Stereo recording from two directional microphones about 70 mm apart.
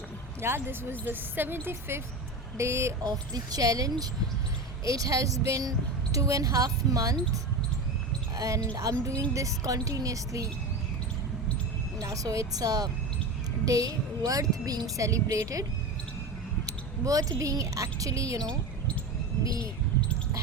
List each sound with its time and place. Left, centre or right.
0.4 s speech: right
3.0 s a woman's voice: right
4.9 s speech: right
8.4 s speech: right
11.9 s a woman's voice: right
16.6 s speech: right